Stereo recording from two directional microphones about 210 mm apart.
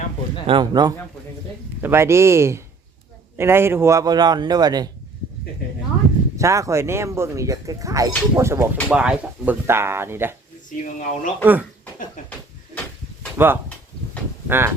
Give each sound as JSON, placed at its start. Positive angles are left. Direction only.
{"t": 0.4, "sound": "a man's voice", "side_deg": -20}
{"t": 6.3, "sound": "speech", "side_deg": -15}
{"t": 10.7, "sound": "speech", "side_deg": 40}
{"t": 12.2, "sound": "a sound", "side_deg": 35}
{"t": 13.3, "sound": "speech", "side_deg": -10}